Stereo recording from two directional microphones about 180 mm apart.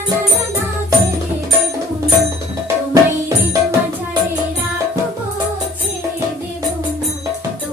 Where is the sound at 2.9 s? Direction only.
15° right (ahead or behind).